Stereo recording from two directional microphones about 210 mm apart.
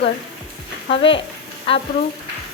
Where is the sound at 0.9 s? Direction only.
25° left (ahead or behind).